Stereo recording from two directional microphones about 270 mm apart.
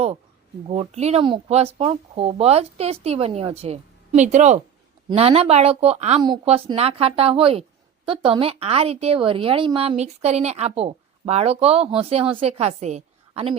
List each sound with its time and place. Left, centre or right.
0.7 s speech: right